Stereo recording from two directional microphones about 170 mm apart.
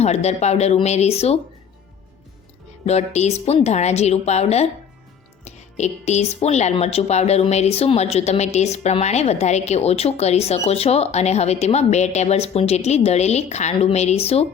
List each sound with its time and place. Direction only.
0.0 s speech: 40° left (ahead or behind)
2.8 s speech: 40° left (ahead or behind)